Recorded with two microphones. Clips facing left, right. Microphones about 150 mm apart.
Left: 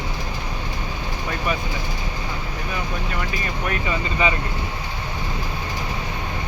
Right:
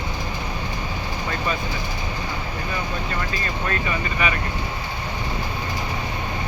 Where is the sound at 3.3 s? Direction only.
15° left (ahead or behind).